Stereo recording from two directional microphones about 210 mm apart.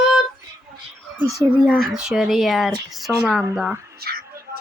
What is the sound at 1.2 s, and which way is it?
Speech, 15° right (ahead or behind).